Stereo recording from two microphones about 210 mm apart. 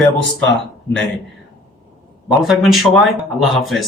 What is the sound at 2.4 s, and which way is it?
A man's voice, centre (ahead or behind).